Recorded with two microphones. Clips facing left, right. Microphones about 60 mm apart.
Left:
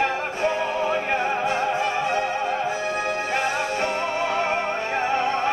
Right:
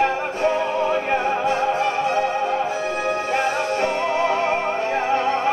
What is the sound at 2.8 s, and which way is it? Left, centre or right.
Music, centre.